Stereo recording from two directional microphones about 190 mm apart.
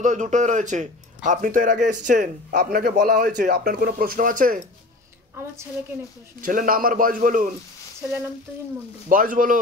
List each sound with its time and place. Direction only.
0.0 s speech: 40° right (ahead or behind)
6.4 s speech: 45° right (ahead or behind)
9.1 s speech: 45° right (ahead or behind)